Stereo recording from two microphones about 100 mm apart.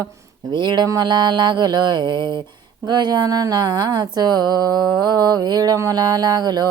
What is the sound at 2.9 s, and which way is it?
Speech, 45° right (ahead or behind).